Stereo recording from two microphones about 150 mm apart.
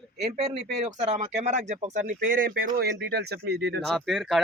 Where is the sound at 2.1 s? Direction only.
70° right (ahead or behind).